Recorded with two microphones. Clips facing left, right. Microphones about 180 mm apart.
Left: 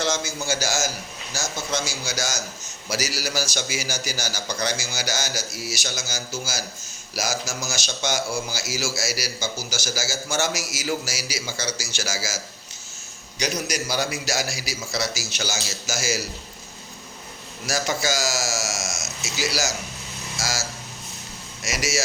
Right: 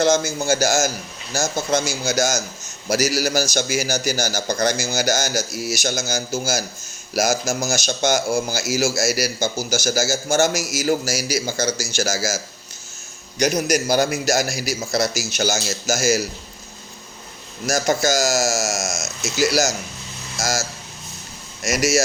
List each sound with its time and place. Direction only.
0.0 s speech: 50° right (ahead or behind)
13.4 s speech: 45° right (ahead or behind)
17.7 s speech: 45° right (ahead or behind)